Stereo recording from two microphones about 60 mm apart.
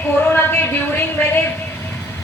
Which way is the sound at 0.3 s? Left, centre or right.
Left.